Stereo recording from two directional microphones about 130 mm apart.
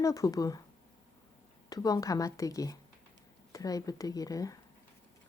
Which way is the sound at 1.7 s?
30° left (ahead or behind).